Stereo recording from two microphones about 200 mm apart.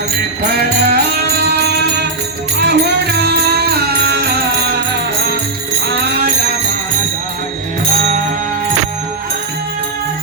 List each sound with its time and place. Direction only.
0.4 s music: 55° right (ahead or behind)